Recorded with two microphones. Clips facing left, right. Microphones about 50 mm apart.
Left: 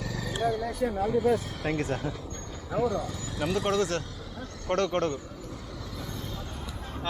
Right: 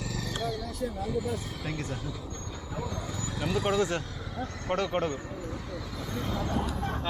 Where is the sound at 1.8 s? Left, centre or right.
Left.